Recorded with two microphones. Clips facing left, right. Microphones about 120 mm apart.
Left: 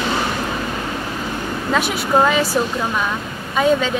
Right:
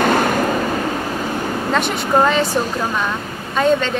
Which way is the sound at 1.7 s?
5° left (ahead or behind).